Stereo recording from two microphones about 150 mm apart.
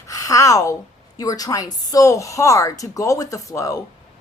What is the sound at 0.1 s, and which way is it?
A woman's voice, 20° left (ahead or behind).